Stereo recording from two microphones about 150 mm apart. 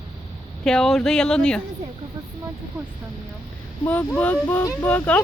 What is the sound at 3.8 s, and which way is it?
Speech, 15° left (ahead or behind).